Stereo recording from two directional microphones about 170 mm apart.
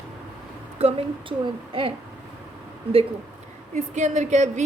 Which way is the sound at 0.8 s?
35° right (ahead or behind).